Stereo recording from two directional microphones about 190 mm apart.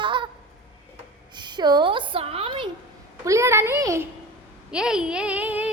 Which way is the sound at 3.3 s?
15° right (ahead or behind).